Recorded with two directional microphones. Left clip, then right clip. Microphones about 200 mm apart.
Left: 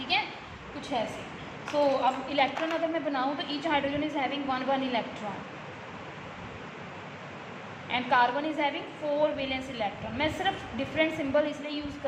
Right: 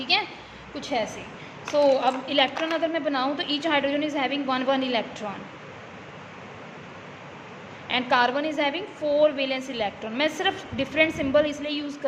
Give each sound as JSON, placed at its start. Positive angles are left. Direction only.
{"t": 0.1, "sound": "a sound", "side_deg": -50}
{"t": 0.8, "sound": "a woman's voice", "side_deg": -50}
{"t": 7.9, "sound": "a woman's voice", "side_deg": -50}